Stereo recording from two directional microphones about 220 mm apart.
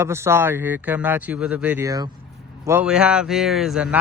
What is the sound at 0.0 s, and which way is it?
Speech, 10° right (ahead or behind).